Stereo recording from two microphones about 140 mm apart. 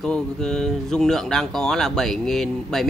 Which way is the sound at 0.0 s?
5° left (ahead or behind).